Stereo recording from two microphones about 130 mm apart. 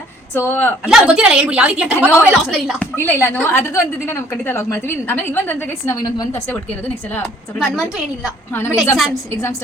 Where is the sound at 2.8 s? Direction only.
15° left (ahead or behind).